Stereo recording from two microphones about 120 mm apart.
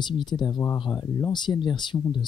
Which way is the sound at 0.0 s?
40° left (ahead or behind).